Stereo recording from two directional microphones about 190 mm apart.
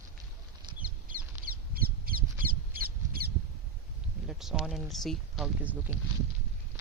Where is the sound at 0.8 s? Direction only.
45° right (ahead or behind).